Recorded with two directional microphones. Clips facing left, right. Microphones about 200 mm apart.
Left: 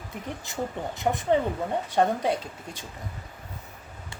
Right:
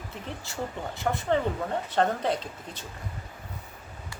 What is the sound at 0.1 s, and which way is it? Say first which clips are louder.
Speech: left 5 dB; 15° left (ahead or behind).